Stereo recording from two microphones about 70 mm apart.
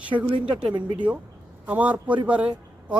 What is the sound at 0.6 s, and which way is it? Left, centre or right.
A man's voice, centre.